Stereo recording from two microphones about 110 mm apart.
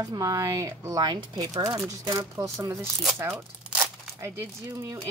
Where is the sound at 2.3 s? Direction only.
25° right (ahead or behind).